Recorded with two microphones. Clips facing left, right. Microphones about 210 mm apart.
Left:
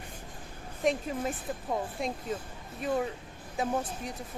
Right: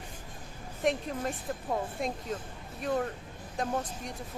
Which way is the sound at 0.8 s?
Centre (ahead or behind).